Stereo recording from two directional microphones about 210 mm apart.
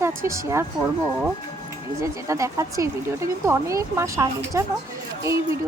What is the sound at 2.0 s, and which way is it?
Speech, 15° right (ahead or behind).